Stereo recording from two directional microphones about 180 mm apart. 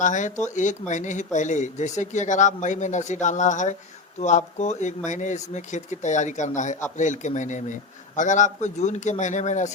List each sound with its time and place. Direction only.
0.0 s speech: 45° left (ahead or behind)